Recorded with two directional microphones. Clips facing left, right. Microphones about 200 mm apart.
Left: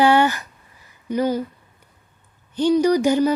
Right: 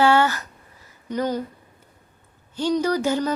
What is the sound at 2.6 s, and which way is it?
Speech, 15° left (ahead or behind).